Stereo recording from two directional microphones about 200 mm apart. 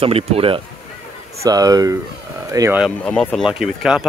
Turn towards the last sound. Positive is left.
turn(degrees=-5)  # may be behind; listen again after turning